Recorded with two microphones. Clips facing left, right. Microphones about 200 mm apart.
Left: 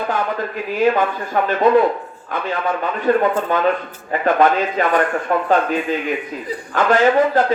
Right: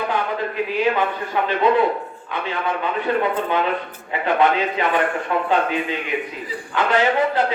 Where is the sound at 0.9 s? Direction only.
45° left (ahead or behind).